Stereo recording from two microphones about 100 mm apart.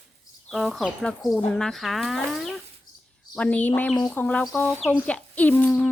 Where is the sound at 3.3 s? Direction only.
10° left (ahead or behind).